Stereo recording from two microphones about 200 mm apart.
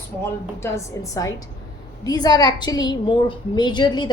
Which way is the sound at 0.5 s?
15° left (ahead or behind).